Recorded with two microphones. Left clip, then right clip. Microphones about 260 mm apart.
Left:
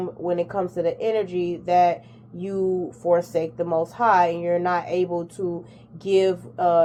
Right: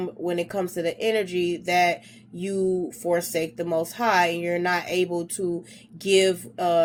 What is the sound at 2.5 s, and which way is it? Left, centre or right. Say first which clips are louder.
Speech: left 1 dB; right.